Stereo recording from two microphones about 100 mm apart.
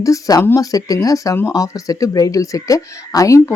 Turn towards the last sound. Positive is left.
turn(degrees=35)  # may be behind; listen again after turning